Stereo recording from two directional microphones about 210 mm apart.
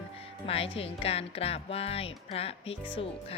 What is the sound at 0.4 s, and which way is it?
Speech, 25° left (ahead or behind).